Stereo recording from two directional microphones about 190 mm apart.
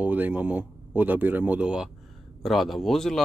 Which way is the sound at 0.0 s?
10° right (ahead or behind).